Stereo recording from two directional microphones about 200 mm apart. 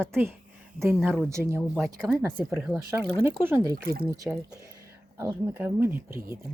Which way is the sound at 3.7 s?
45° right (ahead or behind).